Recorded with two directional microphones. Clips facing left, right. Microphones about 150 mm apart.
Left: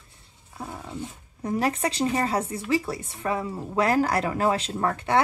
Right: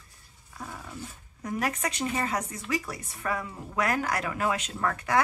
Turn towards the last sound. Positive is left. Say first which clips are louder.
# left 3 dB
turn(degrees=30)  # may be behind; listen again after turning